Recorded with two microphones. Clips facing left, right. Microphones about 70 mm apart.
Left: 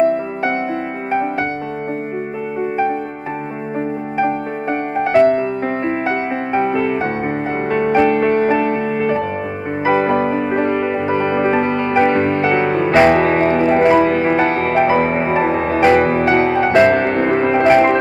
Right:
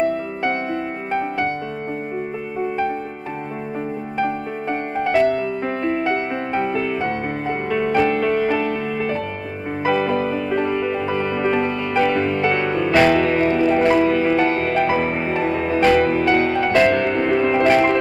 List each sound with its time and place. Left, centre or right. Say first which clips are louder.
5.0 s music: left 5 dB; left
8.2 s music: left 4 dB; left
11.6 s music: left 4 dB; left
12.4 s music: left 4 dB; left
16.9 s music: left 3 dB; left